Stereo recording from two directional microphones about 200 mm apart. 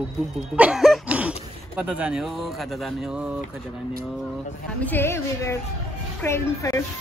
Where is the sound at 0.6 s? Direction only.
5° right (ahead or behind).